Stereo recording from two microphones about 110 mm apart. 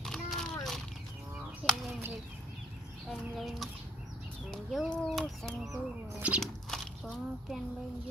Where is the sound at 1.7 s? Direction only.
Centre (ahead or behind).